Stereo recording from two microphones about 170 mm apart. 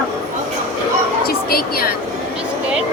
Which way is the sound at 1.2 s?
65° left (ahead or behind).